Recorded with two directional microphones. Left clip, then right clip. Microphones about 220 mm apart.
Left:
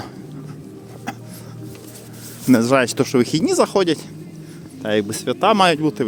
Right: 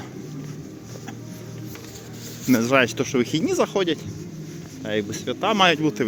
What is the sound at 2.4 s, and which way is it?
Speech, 25° left (ahead or behind).